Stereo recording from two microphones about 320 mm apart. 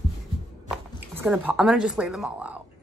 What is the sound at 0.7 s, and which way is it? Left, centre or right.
A woman's voice, centre.